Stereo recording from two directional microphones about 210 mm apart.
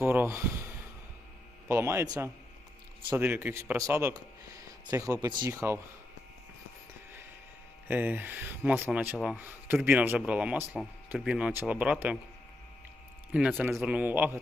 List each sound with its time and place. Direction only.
0.0 s a man's voice: 10° right (ahead or behind)
3.1 s speech: 10° right (ahead or behind)
7.9 s speech: 10° right (ahead or behind)
13.3 s speech: centre (ahead or behind)